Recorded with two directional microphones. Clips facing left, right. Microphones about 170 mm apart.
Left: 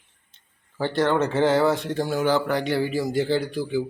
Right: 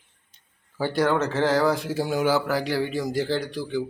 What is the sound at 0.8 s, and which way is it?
Speech, 5° right (ahead or behind).